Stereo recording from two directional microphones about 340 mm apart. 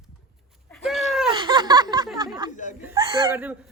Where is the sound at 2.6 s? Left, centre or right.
Left.